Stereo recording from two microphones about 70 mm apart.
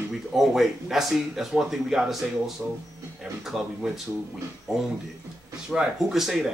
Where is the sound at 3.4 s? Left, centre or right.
Centre.